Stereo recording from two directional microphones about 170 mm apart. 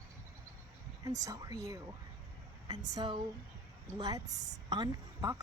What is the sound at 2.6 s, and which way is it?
Speech, 25° right (ahead or behind).